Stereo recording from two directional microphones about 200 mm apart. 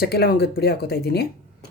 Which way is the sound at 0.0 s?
50° left (ahead or behind).